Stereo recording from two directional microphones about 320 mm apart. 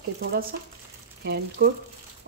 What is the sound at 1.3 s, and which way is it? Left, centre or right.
Speech, right.